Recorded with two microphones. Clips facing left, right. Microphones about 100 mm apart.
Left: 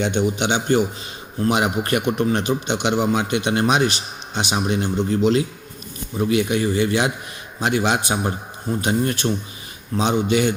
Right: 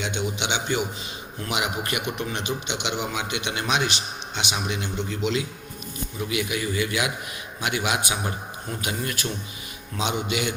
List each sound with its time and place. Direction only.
0.0 s a man's voice: 50° left (ahead or behind); by 10.5 s 35° left (ahead or behind)